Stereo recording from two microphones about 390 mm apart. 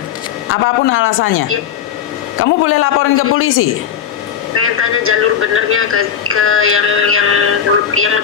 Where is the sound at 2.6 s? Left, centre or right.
Left.